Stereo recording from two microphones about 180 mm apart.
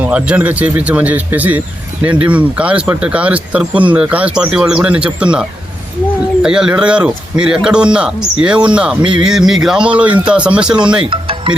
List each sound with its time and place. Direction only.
0.0 s speech: 5° right (ahead or behind)
11.1 s music: 30° right (ahead or behind)